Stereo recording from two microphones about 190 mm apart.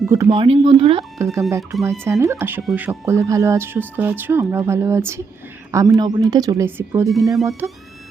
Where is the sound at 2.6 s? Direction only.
Centre (ahead or behind).